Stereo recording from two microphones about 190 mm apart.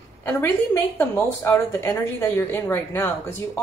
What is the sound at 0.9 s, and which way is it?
Speech, 15° left (ahead or behind).